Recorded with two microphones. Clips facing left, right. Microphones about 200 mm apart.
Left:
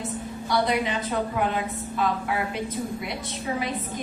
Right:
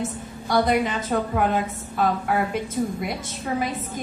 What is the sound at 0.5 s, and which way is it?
A woman's voice, 50° right (ahead or behind).